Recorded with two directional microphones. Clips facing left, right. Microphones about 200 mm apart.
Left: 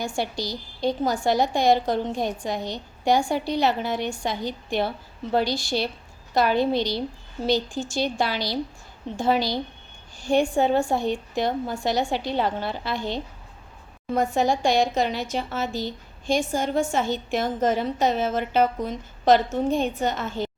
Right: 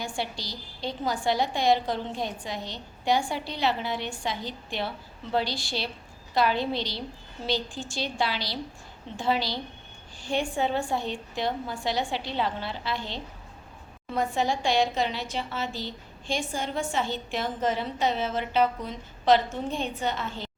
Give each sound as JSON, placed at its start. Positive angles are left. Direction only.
{"t": 0.0, "sound": "a woman's voice", "side_deg": 45}